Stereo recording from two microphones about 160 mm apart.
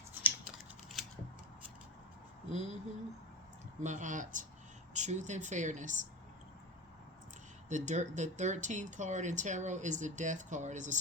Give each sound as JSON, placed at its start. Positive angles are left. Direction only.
{"t": 0.1, "sound": "typing", "side_deg": -10}
{"t": 2.5, "sound": "speech", "side_deg": -45}
{"t": 3.8, "sound": "speech", "side_deg": -50}
{"t": 7.7, "sound": "speech", "side_deg": -50}